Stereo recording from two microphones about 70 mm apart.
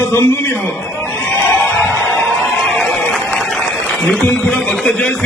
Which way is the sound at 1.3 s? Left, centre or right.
Centre.